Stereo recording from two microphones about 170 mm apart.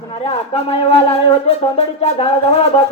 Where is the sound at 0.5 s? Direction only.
35° left (ahead or behind).